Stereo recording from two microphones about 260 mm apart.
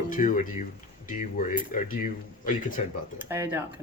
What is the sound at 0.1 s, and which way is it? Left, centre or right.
Speech, left.